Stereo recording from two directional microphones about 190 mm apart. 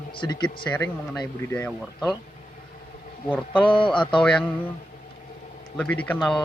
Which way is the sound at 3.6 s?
25° left (ahead or behind).